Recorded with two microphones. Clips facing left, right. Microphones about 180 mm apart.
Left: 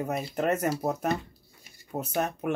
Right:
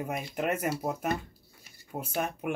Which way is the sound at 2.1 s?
10° right (ahead or behind).